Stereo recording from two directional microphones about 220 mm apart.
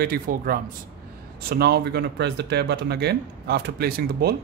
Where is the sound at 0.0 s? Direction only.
40° right (ahead or behind).